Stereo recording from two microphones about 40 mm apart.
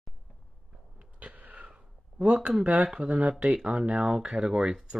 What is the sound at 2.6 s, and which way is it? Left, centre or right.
Speech, right.